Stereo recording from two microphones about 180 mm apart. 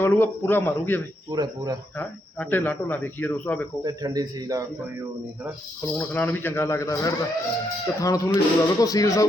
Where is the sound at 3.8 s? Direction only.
20° right (ahead or behind).